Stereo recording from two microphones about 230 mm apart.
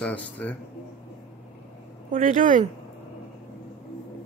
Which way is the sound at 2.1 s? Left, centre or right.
Right.